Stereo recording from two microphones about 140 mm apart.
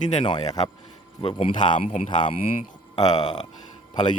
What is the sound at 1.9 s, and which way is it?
Speech, 50° left (ahead or behind).